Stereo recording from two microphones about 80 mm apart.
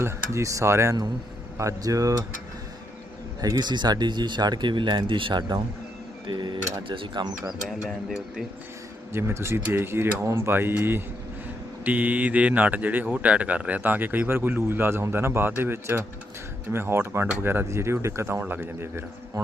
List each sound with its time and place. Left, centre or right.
0.0 s speech: right
3.4 s speech: right
6.8 s speech: right
7.7 s speech: centre
9.1 s speech: right
18.4 s speech: right